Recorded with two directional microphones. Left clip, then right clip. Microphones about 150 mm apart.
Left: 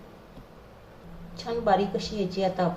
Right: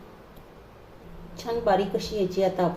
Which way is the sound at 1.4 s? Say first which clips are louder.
Right 1 dB; 25° right (ahead or behind).